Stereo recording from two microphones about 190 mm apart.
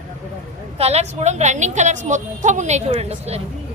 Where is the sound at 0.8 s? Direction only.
35° right (ahead or behind).